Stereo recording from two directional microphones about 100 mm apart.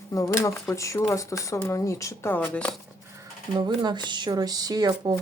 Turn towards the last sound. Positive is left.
turn(degrees=-45)  # may be behind; listen again after turning